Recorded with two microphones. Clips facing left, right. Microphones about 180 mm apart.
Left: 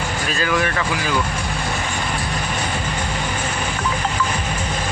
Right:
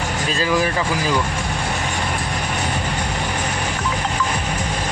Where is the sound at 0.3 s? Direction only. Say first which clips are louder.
Right 2 dB; 30° right (ahead or behind).